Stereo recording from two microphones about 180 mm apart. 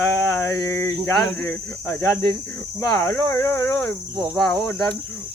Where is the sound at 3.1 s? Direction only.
15° left (ahead or behind).